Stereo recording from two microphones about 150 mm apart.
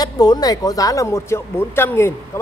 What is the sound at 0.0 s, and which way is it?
Speech, 25° left (ahead or behind).